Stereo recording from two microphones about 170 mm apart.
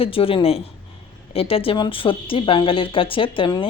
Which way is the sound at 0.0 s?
35° left (ahead or behind).